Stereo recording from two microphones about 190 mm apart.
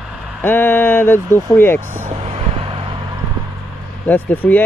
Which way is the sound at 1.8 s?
10° right (ahead or behind).